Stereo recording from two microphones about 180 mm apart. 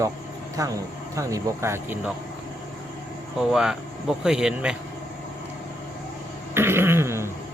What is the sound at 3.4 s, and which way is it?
Speech, centre (ahead or behind).